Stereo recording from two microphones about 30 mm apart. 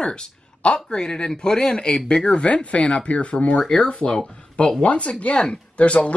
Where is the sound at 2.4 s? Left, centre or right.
Left.